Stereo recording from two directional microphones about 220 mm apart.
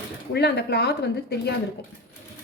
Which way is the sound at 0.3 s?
50° left (ahead or behind).